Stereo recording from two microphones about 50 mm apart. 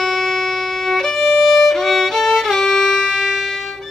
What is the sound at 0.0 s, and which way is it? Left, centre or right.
Violin, centre.